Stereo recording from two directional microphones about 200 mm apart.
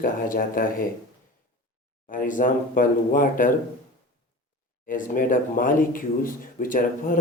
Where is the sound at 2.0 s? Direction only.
40° left (ahead or behind).